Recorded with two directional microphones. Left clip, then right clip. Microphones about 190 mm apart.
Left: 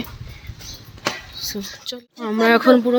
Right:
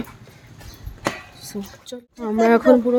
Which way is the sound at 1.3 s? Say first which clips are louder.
Left 6 dB; 10° right (ahead or behind).